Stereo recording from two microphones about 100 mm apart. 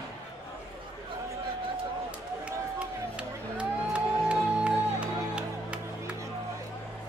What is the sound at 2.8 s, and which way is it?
Music, 10° right (ahead or behind).